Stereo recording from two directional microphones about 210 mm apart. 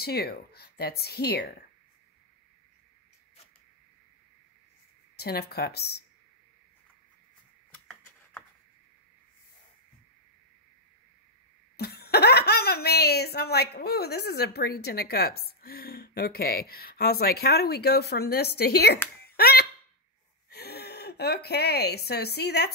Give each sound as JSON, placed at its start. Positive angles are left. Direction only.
{"t": 0.0, "sound": "speech", "side_deg": 50}
{"t": 5.1, "sound": "speech", "side_deg": 50}
{"t": 7.7, "sound": "a sound", "side_deg": 5}
{"t": 11.7, "sound": "a woman's voice", "side_deg": 50}